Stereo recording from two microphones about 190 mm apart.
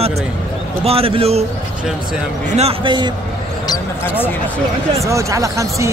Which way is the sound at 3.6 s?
10° left (ahead or behind).